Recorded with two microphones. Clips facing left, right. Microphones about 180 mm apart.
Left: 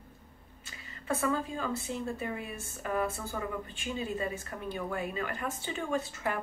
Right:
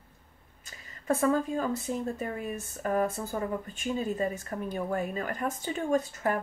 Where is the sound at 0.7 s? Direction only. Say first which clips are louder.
Right 5 dB; 40° right (ahead or behind).